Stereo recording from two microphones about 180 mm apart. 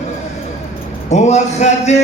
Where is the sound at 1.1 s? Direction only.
40° left (ahead or behind).